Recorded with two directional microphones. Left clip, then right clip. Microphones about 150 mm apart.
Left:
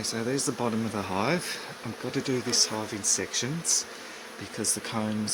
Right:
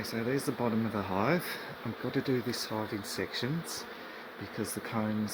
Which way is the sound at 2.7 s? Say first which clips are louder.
Left 5 dB; 10° left (ahead or behind).